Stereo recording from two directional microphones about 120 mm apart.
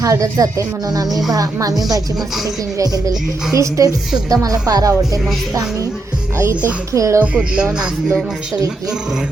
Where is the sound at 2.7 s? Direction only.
30° right (ahead or behind).